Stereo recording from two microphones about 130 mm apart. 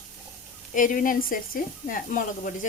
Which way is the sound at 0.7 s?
90° left.